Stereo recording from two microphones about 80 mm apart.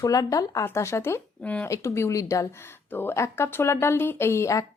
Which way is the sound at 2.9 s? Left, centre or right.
Left.